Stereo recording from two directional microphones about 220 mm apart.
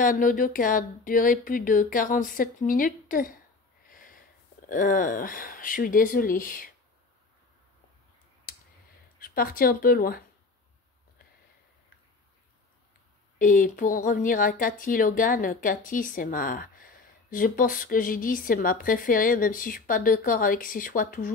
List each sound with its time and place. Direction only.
0.0 s a woman's voice: 40° left (ahead or behind)
3.9 s sniff: 40° left (ahead or behind)
4.6 s a woman's voice: 35° left (ahead or behind)
9.2 s a woman's voice: 40° left (ahead or behind)
13.4 s a woman's voice: 40° left (ahead or behind)